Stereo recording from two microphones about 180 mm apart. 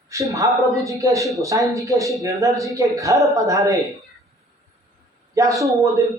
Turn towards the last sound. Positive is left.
turn(degrees=-20)  # may be behind; listen again after turning